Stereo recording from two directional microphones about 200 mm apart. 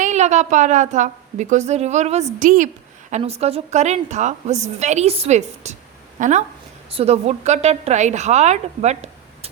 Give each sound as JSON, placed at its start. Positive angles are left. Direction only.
{"t": 0.0, "sound": "a woman's voice", "side_deg": -35}